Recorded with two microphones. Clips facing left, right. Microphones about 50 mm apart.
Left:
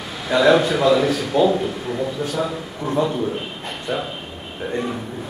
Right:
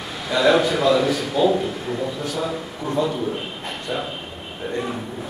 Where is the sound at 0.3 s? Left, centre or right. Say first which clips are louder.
Left 2 dB; centre.